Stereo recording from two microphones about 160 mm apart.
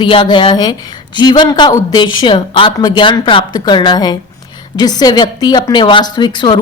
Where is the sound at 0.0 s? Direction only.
30° left (ahead or behind).